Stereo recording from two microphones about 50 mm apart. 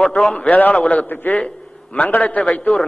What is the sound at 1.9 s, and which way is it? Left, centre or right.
Speech, left.